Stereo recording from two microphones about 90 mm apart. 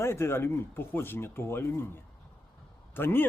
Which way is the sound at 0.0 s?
30° left (ahead or behind).